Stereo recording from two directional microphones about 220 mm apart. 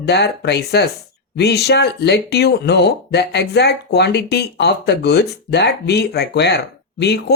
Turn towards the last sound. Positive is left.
turn(degrees=50)  # may be behind; listen again after turning